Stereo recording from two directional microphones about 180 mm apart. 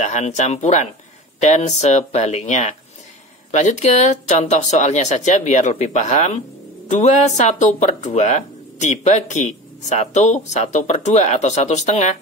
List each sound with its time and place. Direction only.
0.0 s speech: 40° left (ahead or behind)